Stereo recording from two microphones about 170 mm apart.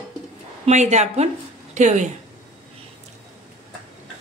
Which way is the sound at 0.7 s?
40° right (ahead or behind).